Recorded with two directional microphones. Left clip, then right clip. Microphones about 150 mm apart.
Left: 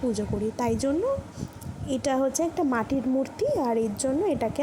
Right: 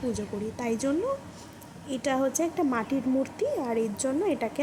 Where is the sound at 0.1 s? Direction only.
20° left (ahead or behind).